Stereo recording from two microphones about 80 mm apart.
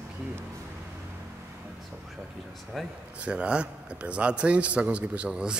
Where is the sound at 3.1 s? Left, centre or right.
Centre.